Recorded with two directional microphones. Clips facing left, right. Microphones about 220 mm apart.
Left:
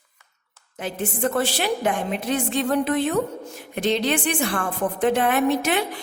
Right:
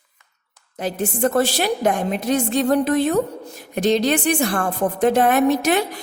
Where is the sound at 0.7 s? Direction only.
40° right (ahead or behind).